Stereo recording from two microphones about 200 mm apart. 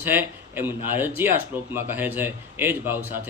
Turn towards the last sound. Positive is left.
turn(degrees=-10)  # may be behind; listen again after turning